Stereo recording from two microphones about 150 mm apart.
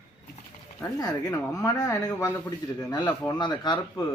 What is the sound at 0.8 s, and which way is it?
Speech, 20° left (ahead or behind).